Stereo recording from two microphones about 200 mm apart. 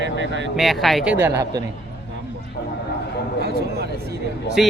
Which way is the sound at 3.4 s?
50° right (ahead or behind).